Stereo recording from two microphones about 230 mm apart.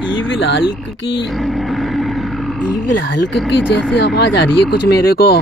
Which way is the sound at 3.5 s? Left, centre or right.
Left.